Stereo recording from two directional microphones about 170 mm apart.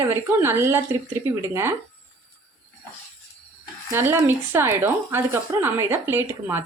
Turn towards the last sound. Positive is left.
turn(degrees=-15)  # may be behind; listen again after turning